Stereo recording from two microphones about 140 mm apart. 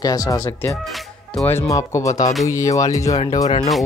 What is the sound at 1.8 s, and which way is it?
Speech, 25° left (ahead or behind).